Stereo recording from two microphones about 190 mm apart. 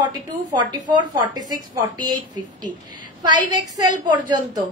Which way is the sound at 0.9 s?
25° right (ahead or behind).